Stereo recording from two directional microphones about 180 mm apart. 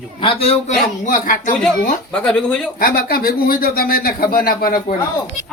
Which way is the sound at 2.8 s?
55° left (ahead or behind).